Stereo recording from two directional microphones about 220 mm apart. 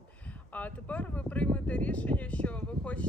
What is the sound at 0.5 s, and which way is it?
Speech, 5° left (ahead or behind).